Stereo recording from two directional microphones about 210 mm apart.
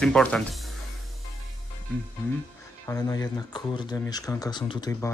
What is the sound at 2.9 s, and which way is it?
Speech, 15° left (ahead or behind).